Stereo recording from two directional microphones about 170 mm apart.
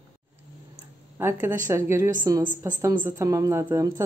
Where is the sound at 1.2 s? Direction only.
15° right (ahead or behind).